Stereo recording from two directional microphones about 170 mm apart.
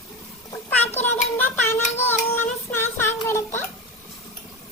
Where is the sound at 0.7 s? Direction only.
10° left (ahead or behind).